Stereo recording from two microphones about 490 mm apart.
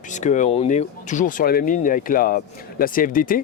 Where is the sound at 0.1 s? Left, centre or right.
Centre.